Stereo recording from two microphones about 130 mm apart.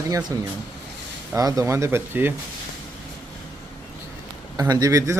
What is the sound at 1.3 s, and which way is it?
Speech, 25° right (ahead or behind).